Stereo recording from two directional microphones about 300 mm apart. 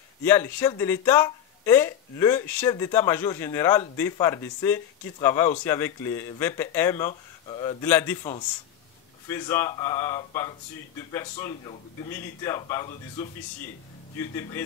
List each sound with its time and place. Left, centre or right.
0.2 s speech: centre